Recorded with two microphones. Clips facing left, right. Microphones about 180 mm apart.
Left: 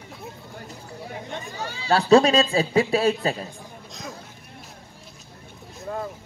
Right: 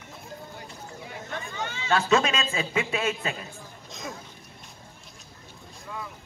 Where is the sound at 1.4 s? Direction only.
35° left (ahead or behind).